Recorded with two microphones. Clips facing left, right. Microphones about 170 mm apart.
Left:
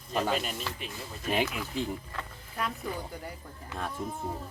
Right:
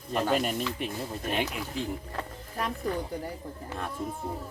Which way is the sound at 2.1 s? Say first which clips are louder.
Right 3 dB; 35° right (ahead or behind).